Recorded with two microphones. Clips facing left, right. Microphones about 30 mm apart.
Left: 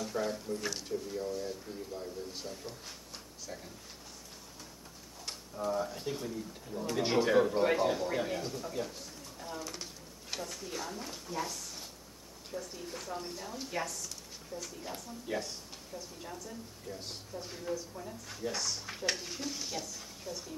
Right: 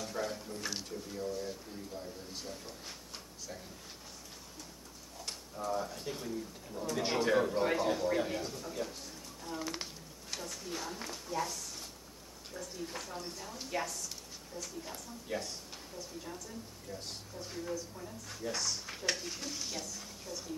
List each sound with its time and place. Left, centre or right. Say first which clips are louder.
0.0 s a sound: left 3 dB; centre
0.8 s speech: left 3 dB; centre
5.7 s speech: left 2 dB; centre
9.6 s speech: right 5 dB; right
10.3 s a woman's voice: left 1 dB; centre